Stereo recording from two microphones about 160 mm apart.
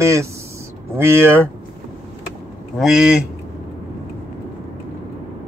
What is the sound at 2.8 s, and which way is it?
Speech, 5° right (ahead or behind).